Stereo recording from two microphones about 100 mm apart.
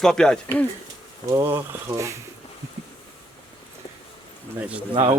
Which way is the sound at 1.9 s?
30° right (ahead or behind).